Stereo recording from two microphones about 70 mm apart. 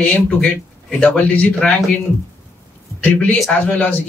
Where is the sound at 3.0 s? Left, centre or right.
Left.